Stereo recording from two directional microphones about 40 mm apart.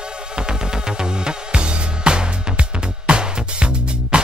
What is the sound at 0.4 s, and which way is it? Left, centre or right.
Music, centre.